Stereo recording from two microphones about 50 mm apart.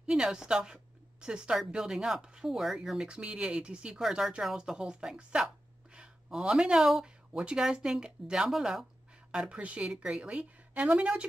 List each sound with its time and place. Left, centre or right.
0.0 s speech: centre
3.2 s a woman's voice: right